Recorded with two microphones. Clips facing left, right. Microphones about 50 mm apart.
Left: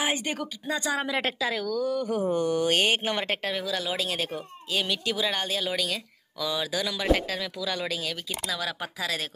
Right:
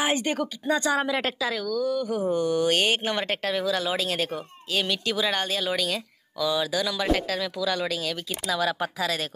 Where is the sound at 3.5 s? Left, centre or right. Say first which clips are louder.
Right 4 dB; centre.